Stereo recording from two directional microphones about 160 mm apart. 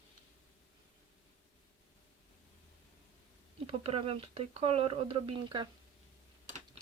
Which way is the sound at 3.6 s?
40° right (ahead or behind).